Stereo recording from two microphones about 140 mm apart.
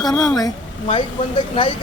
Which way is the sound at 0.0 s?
25° left (ahead or behind).